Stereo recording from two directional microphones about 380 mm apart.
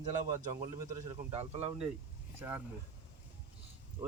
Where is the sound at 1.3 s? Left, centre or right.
Centre.